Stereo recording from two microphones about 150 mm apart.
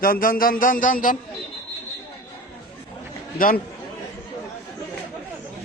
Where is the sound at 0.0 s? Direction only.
70° left (ahead or behind).